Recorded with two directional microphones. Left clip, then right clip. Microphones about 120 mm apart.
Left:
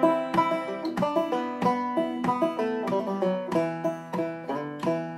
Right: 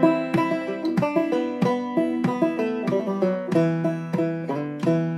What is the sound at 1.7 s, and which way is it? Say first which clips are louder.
Music: left 1 dB; 30° left (ahead or behind).